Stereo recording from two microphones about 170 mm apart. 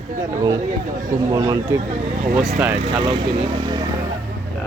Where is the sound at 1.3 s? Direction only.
20° right (ahead or behind).